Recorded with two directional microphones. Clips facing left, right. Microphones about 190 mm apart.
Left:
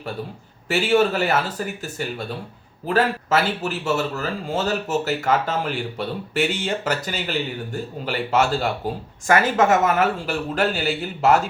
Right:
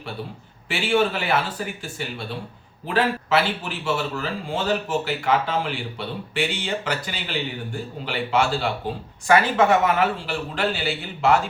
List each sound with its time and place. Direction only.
0.7 s a man's voice: 40° left (ahead or behind)